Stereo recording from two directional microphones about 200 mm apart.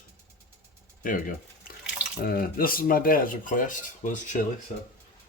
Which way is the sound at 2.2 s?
45° left (ahead or behind).